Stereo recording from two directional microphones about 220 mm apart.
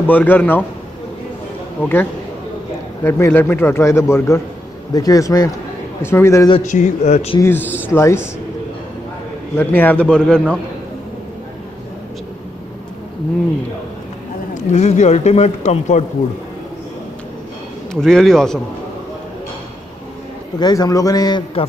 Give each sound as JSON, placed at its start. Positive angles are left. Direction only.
{"t": 0.0, "sound": "speech", "side_deg": 10}
{"t": 1.8, "sound": "speech", "side_deg": 10}
{"t": 6.6, "sound": "a man's voice", "side_deg": 35}
{"t": 7.3, "sound": "speech", "side_deg": 10}
{"t": 9.6, "sound": "a man's voice", "side_deg": 10}
{"t": 14.5, "sound": "a man's voice", "side_deg": 30}
{"t": 18.0, "sound": "a man's voice", "side_deg": 0}
{"t": 20.5, "sound": "speech", "side_deg": 20}